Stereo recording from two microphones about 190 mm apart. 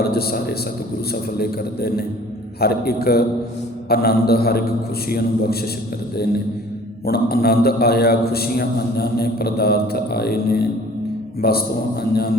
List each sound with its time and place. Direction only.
0.0 s a man's voice: 55° left (ahead or behind)
7.0 s a man's voice: 55° left (ahead or behind)